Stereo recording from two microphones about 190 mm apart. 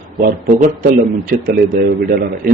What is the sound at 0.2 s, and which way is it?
A man's voice, 45° right (ahead or behind).